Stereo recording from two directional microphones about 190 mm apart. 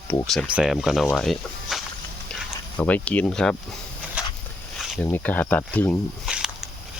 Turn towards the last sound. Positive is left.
turn(degrees=-5)  # may be behind; listen again after turning